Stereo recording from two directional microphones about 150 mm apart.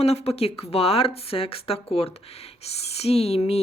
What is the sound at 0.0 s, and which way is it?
Speech, 45° left (ahead or behind).